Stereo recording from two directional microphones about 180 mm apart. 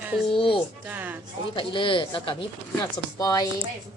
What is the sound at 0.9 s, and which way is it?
Speech, 10° right (ahead or behind).